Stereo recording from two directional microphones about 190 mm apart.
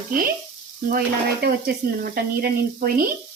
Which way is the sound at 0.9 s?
50° right (ahead or behind).